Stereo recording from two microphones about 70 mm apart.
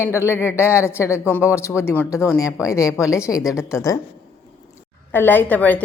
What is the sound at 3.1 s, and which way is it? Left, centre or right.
Speech, left.